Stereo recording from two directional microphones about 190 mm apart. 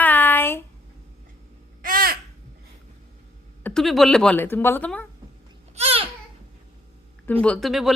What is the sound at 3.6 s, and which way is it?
Speech, 5° left (ahead or behind).